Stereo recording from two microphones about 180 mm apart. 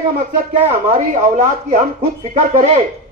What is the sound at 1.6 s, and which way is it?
A man's voice, 40° right (ahead or behind).